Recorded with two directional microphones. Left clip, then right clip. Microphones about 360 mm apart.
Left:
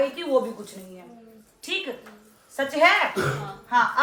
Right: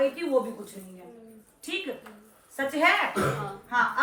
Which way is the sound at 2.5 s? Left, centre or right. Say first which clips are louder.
Left 4 dB; centre.